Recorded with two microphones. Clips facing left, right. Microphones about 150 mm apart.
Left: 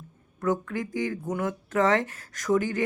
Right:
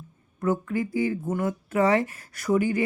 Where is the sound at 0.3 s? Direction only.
10° right (ahead or behind).